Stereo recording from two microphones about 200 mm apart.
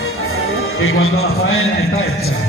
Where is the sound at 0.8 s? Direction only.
90° left.